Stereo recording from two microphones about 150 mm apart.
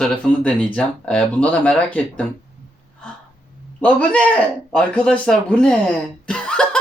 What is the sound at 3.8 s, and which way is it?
Speech, 10° left (ahead or behind).